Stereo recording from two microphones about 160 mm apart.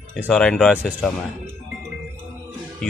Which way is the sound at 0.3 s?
5° left (ahead or behind).